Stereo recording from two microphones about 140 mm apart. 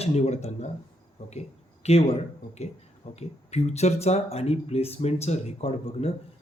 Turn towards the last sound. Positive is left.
turn(degrees=50)  # may be behind; listen again after turning